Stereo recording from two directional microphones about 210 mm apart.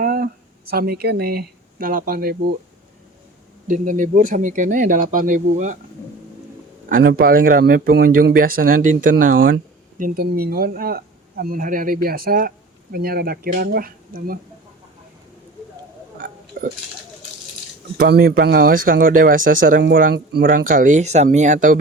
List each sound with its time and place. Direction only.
0.0 s a sound: 45° right (ahead or behind)
0.7 s speech: 45° right (ahead or behind)
3.7 s speech: 40° right (ahead or behind)
6.8 s speech: 45° right (ahead or behind)
16.2 s a sound: 40° right (ahead or behind)
18.0 s speech: 45° right (ahead or behind)